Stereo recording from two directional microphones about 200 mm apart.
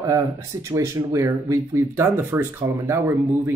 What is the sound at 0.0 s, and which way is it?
Speech, 15° right (ahead or behind).